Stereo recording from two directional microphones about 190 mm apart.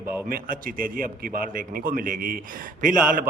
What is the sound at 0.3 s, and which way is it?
A man's voice, 50° right (ahead or behind).